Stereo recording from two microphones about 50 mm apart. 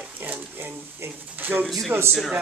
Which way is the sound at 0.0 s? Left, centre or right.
Right.